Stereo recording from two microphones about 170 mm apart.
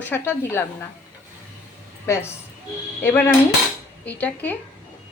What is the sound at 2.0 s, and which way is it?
Dishes, 15° left (ahead or behind).